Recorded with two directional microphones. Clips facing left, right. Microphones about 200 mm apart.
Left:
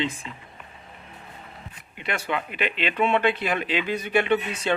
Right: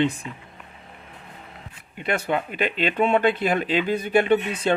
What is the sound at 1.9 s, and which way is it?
Speech, 45° right (ahead or behind).